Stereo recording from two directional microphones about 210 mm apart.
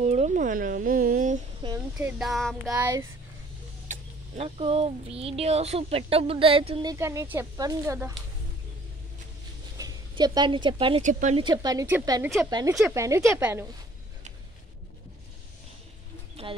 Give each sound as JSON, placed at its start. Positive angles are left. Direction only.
{"t": 0.0, "sound": "speech", "side_deg": -30}
{"t": 1.6, "sound": "a sound", "side_deg": -20}
{"t": 2.0, "sound": "speech", "side_deg": -5}
{"t": 2.7, "sound": "speech", "side_deg": -15}
{"t": 3.9, "sound": "speech", "side_deg": -30}
{"t": 9.8, "sound": "speech", "side_deg": -20}
{"t": 11.1, "sound": "speech", "side_deg": -35}
{"t": 11.4, "sound": "speech", "side_deg": -20}
{"t": 16.4, "sound": "speech", "side_deg": -30}